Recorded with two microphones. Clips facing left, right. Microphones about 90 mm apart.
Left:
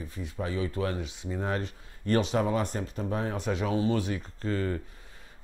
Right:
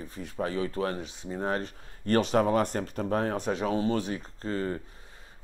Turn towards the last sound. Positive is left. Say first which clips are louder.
# left 1 dB
turn(degrees=-30)  # may be behind; listen again after turning